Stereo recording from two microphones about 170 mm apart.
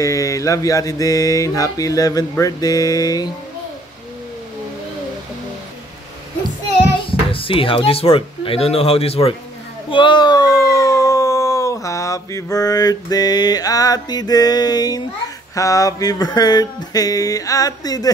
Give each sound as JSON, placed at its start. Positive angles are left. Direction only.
{"t": 0.0, "sound": "mantra", "side_deg": 20}
{"t": 7.1, "sound": "speech", "side_deg": 30}
{"t": 15.5, "sound": "mantra", "side_deg": 20}